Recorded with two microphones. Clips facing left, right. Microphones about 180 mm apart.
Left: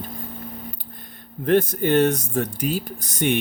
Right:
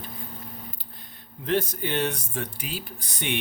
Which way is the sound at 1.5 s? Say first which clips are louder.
Left 8 dB; 50° left (ahead or behind).